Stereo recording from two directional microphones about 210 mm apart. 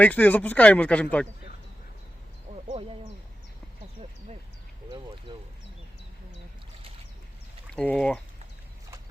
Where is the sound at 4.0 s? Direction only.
25° right (ahead or behind).